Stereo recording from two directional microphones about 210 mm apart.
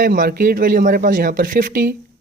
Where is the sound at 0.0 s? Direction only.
45° right (ahead or behind).